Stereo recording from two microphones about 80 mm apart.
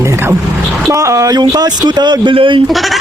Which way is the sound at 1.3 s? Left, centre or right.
Right.